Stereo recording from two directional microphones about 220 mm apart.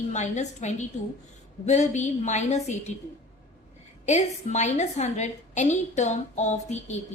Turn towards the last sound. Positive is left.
turn(degrees=30)  # may be behind; listen again after turning